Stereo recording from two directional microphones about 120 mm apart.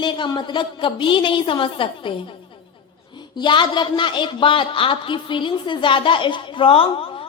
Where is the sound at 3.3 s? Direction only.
40° left (ahead or behind).